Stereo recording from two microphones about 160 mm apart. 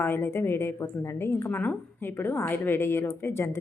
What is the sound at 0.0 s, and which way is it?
A woman's voice, 15° left (ahead or behind).